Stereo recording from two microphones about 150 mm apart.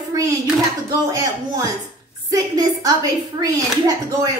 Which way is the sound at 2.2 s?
25° right (ahead or behind).